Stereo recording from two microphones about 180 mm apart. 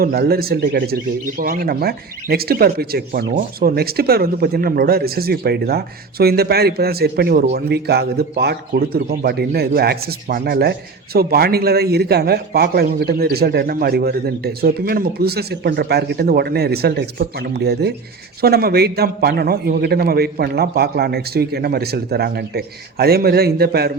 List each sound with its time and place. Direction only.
0.0 s a man's voice: 60° right (ahead or behind)